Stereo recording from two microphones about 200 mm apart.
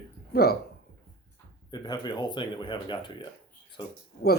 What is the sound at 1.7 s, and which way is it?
Speech, 20° left (ahead or behind).